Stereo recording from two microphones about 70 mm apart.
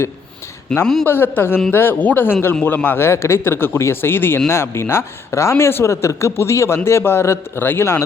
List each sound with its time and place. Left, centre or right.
0.7 s a man's voice: centre
1.0 s speech: left